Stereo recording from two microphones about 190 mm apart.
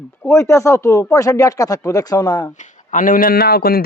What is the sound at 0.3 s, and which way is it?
Speech, 15° left (ahead or behind).